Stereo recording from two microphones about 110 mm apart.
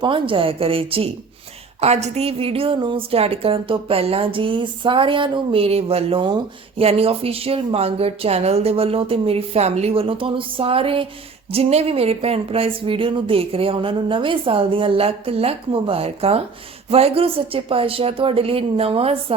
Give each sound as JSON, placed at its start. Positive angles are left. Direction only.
{"t": 0.0, "sound": "a woman's voice", "side_deg": -50}
{"t": 1.8, "sound": "a woman's voice", "side_deg": -75}
{"t": 11.5, "sound": "a woman's voice", "side_deg": -65}